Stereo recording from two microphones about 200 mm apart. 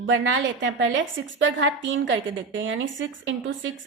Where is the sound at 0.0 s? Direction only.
70° right (ahead or behind).